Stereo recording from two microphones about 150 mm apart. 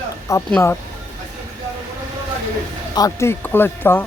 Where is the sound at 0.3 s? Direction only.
20° left (ahead or behind).